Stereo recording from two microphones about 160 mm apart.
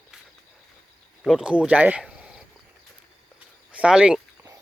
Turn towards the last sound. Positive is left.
turn(degrees=-5)  # may be behind; listen again after turning